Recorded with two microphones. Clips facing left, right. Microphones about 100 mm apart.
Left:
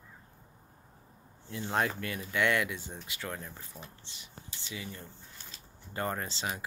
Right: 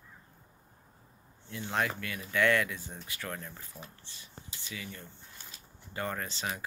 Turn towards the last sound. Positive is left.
turn(degrees=30)  # may be behind; listen again after turning